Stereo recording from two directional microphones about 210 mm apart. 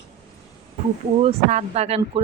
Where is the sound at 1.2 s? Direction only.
30° right (ahead or behind).